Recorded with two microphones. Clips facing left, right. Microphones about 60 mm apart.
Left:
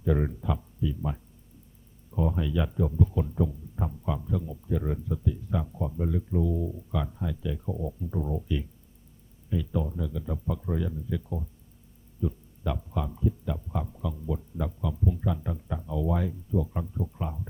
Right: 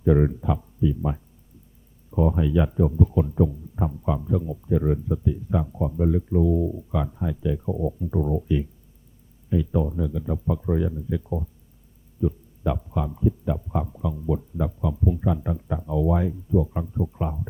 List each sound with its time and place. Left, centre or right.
0.0 s speech: centre